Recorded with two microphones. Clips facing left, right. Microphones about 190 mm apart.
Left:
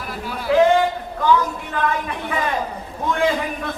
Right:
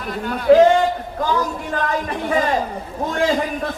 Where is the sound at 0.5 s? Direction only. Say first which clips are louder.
Right 4 dB; 45° right (ahead or behind).